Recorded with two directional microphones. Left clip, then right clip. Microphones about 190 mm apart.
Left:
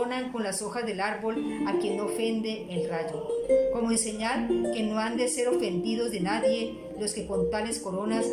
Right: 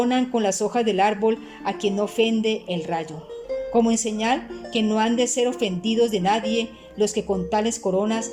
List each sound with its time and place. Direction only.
0.0 s a woman's voice: 50° right (ahead or behind)